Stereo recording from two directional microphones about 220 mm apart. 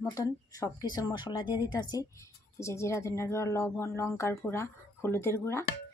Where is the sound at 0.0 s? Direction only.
15° left (ahead or behind).